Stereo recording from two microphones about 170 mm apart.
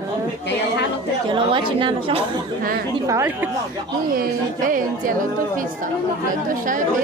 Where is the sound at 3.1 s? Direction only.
15° right (ahead or behind).